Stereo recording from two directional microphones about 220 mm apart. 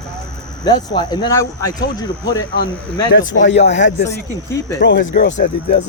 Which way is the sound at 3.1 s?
60° left (ahead or behind).